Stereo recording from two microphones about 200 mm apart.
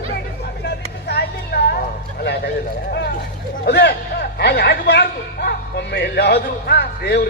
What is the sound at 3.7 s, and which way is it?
A man's voice, 55° left (ahead or behind).